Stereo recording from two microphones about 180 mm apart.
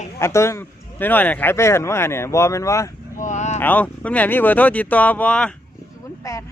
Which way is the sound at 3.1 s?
40° left (ahead or behind).